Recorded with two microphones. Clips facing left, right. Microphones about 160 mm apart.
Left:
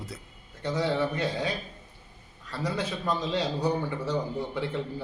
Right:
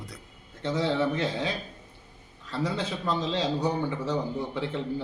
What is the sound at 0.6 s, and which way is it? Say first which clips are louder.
Speech: right 1 dB; 25° right (ahead or behind).